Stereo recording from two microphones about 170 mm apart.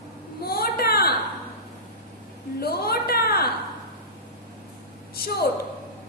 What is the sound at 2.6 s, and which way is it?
Speech, 65° left (ahead or behind).